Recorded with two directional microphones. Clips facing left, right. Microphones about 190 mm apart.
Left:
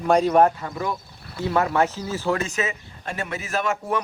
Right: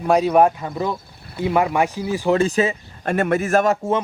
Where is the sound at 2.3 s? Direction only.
30° right (ahead or behind).